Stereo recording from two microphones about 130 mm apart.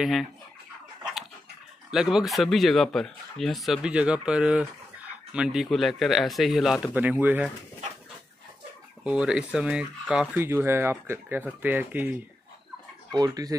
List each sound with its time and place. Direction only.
0.0 s speech: 5° right (ahead or behind)
1.9 s speech: 5° right (ahead or behind)
6.9 s speech: 15° right (ahead or behind)
9.0 s speech: 5° right (ahead or behind)
13.1 s speech: 30° right (ahead or behind)